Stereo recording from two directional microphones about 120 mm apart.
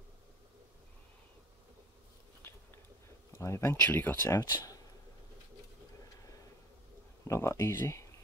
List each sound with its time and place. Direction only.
3.3 s speech: 20° left (ahead or behind)
7.2 s speech: 25° left (ahead or behind)